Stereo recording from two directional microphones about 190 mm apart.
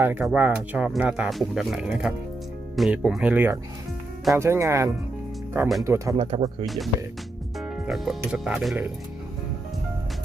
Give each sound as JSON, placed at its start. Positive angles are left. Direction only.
{"t": 0.0, "sound": "speech", "side_deg": -5}
{"t": 6.1, "sound": "speech", "side_deg": -30}
{"t": 6.7, "sound": "speech", "side_deg": 0}
{"t": 7.6, "sound": "music", "side_deg": 0}
{"t": 8.2, "sound": "speech", "side_deg": -5}